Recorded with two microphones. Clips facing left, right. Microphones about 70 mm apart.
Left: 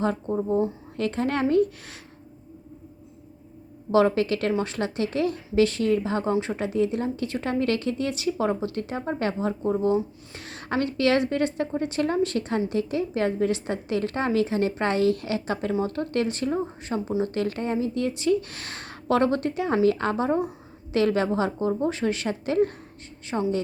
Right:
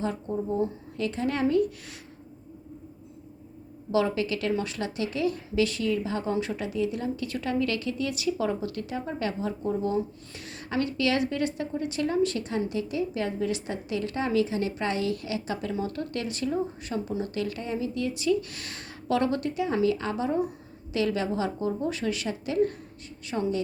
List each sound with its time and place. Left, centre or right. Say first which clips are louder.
0.3 s a woman's voice: left 4 dB; left
3.9 s a woman's voice: left 5 dB; left
4.5 s a woman's voice: left 4 dB; left
10.3 s a woman's voice: left 2 dB; left